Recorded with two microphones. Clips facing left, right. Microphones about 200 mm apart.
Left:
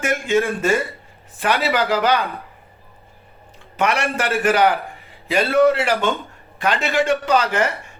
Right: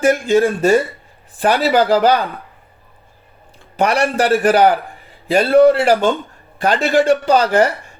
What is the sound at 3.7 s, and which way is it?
Speech, 35° right (ahead or behind).